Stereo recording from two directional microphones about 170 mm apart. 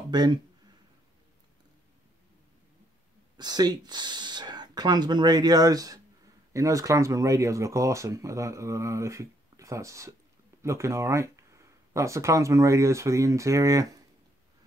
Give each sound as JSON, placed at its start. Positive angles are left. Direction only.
{"t": 0.1, "sound": "speech", "side_deg": -25}
{"t": 3.3, "sound": "speech", "side_deg": -25}